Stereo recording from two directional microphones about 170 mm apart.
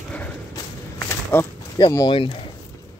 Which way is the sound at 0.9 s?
10° left (ahead or behind).